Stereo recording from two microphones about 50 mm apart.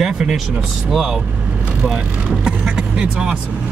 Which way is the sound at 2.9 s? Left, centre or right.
Centre.